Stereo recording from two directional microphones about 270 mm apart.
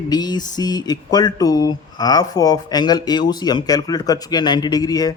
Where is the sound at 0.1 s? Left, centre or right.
Centre.